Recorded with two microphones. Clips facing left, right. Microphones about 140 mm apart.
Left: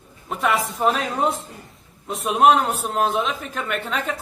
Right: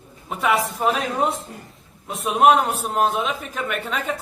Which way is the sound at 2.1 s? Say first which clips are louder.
Even; centre (ahead or behind).